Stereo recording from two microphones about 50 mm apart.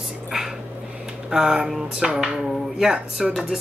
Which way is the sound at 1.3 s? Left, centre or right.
Centre.